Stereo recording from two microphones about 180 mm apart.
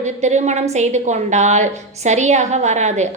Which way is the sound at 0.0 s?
40° right (ahead or behind).